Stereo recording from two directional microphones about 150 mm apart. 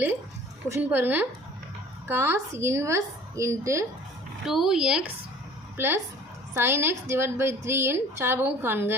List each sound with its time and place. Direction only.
0.7 s a woman's voice: 15° right (ahead or behind)
4.4 s a woman's voice: 5° right (ahead or behind)